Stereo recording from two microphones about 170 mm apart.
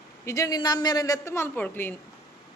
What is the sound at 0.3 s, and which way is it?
A woman's voice, 20° left (ahead or behind).